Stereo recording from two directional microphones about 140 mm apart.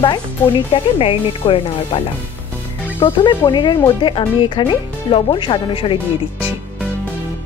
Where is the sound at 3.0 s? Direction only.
35° left (ahead or behind).